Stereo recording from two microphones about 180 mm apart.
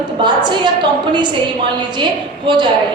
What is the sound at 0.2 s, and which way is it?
A woman's voice, 25° right (ahead or behind).